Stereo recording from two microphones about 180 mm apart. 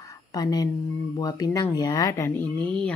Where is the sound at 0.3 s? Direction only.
20° left (ahead or behind).